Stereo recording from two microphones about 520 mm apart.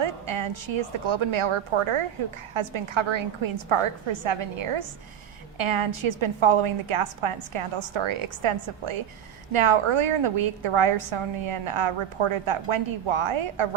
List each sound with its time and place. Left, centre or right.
0.0 s a woman's voice: right